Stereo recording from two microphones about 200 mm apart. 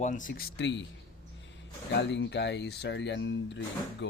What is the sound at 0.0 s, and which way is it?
Speech, 40° left (ahead or behind).